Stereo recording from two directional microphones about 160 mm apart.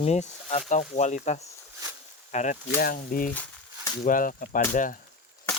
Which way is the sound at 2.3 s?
45° left (ahead or behind).